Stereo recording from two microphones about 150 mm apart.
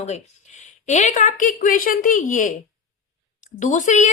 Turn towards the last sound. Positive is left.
turn(degrees=55)  # may be behind; listen again after turning